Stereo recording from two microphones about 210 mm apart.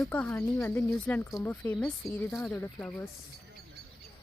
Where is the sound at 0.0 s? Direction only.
10° left (ahead or behind).